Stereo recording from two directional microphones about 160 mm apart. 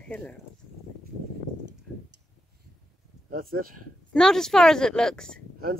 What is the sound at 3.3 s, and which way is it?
Speech, 65° right (ahead or behind).